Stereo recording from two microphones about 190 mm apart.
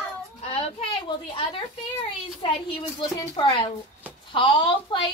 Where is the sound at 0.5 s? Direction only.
35° left (ahead or behind).